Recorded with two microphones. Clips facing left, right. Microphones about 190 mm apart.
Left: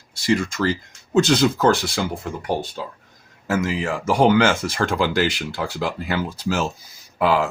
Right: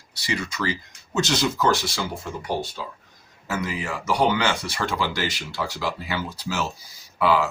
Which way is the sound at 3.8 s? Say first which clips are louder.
Left 4 dB; 50° left (ahead or behind).